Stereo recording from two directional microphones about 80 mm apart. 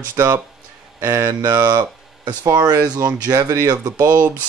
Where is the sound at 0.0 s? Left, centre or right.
Right.